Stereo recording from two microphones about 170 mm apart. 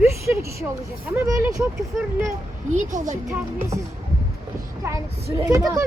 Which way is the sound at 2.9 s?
50° right (ahead or behind).